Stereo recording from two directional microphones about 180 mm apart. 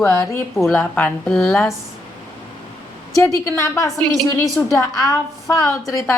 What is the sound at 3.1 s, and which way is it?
A woman's voice, 15° left (ahead or behind).